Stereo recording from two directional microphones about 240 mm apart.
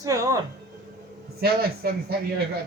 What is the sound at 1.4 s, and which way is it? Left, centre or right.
Speech, right.